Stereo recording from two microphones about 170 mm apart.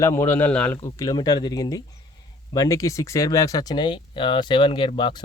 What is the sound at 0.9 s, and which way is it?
Speech, 25° left (ahead or behind).